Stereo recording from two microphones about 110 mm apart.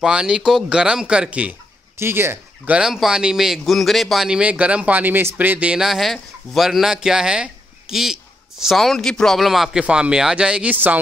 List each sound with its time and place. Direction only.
0.0 s a man's voice: 5° right (ahead or behind)
2.0 s a man's voice: 20° right (ahead or behind)